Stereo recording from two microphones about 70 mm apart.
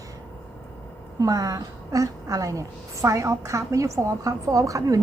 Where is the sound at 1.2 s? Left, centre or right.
Right.